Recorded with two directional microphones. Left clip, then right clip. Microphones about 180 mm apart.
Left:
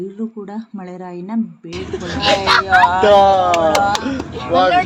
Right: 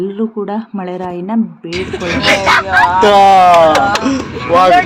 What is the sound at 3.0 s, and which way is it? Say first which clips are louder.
Speech: right 5 dB; 55° right (ahead or behind).